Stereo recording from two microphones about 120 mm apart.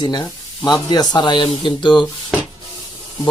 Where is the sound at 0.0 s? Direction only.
40° left (ahead or behind).